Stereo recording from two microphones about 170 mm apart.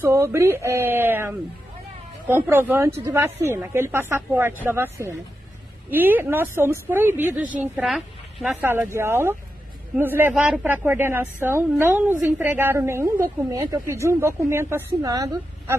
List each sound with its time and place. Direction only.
0.0 s speech: 15° right (ahead or behind)